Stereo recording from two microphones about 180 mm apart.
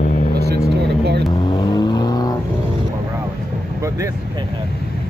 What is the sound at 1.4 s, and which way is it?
Vehicle, 25° left (ahead or behind).